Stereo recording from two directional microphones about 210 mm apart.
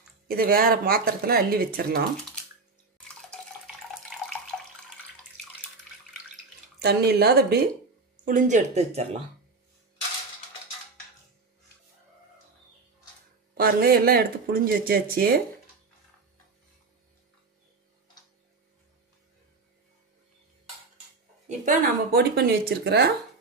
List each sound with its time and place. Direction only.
0.3 s speech: 45° right (ahead or behind)
4.5 s water: centre (ahead or behind)
6.8 s speech: 50° right (ahead or behind)
8.3 s speech: 40° right (ahead or behind)
13.6 s speech: 45° right (ahead or behind)
21.5 s speech: 45° right (ahead or behind)